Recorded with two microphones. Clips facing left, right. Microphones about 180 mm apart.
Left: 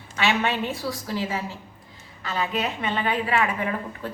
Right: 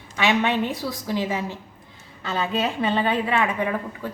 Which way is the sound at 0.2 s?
15° right (ahead or behind).